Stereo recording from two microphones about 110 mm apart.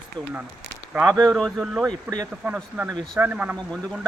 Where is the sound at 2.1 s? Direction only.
15° right (ahead or behind).